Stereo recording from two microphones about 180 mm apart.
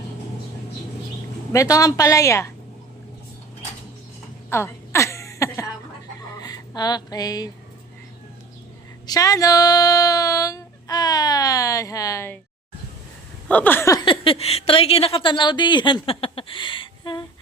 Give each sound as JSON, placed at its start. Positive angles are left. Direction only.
{"t": 1.5, "sound": "a woman's voice", "side_deg": 20}
{"t": 4.4, "sound": "a sound", "side_deg": 15}
{"t": 6.3, "sound": "speech", "side_deg": 20}
{"t": 9.0, "sound": "speech", "side_deg": 20}
{"t": 13.5, "sound": "a woman's voice", "side_deg": 10}